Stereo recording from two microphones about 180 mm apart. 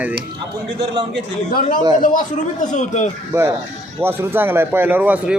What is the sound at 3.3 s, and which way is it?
Speech, 15° right (ahead or behind).